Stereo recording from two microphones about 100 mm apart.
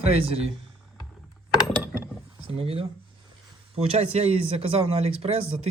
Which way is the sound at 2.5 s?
80° right.